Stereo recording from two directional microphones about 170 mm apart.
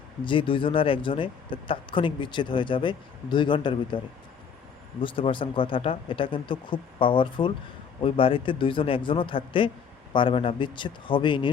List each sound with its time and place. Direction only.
0.3 s speech: 30° left (ahead or behind)